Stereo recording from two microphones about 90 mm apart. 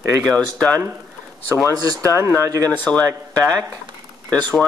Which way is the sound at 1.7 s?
45° right (ahead or behind).